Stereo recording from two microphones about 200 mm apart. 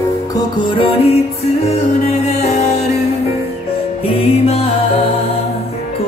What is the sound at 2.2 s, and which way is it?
Music, 35° left (ahead or behind).